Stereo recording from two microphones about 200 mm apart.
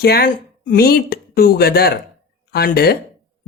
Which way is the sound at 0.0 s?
50° left (ahead or behind).